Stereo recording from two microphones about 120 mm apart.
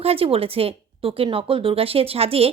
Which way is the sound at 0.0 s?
55° right (ahead or behind).